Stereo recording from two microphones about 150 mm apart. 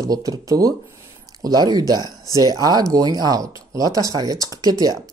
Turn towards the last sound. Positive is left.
turn(degrees=-25)  # may be behind; listen again after turning